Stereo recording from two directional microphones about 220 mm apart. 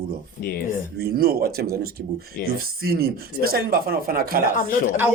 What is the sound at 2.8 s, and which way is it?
Speech, 45° right (ahead or behind).